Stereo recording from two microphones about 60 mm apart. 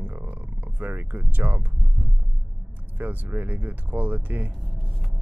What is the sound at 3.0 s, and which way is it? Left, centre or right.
Speech, right.